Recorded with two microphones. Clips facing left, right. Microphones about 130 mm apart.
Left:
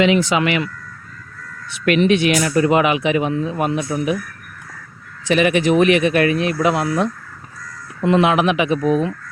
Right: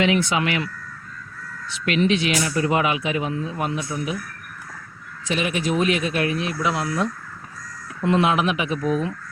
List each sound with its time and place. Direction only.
0.1 s speech: 85° left
1.8 s speech: 60° left (ahead or behind)
5.3 s speech: 70° left (ahead or behind)
8.0 s speech: 80° left